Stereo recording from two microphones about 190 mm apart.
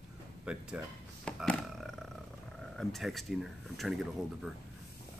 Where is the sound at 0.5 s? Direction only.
5° right (ahead or behind).